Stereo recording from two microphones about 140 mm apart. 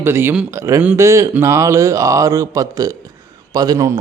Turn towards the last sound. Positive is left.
turn(degrees=-25)  # may be behind; listen again after turning